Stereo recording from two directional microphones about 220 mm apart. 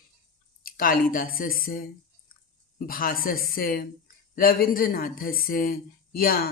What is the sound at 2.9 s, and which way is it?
Speech, 40° left (ahead or behind).